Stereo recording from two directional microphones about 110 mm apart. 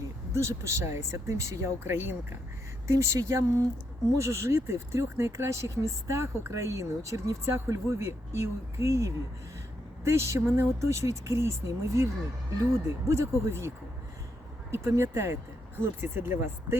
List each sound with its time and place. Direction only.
0.3 s speech: 25° right (ahead or behind)